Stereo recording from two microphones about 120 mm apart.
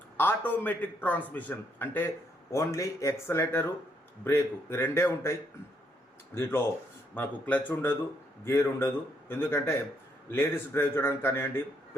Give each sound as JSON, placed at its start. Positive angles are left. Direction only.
{"t": 0.2, "sound": "a man's voice", "side_deg": 15}